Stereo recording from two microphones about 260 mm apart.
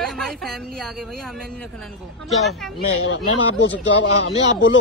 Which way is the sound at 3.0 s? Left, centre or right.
Left.